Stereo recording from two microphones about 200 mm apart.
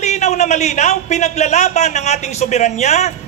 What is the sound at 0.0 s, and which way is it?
A man's voice, 35° left (ahead or behind).